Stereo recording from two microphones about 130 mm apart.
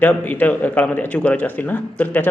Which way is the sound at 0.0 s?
15° left (ahead or behind).